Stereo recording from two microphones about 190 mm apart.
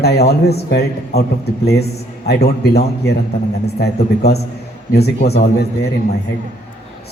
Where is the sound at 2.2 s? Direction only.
60° left (ahead or behind).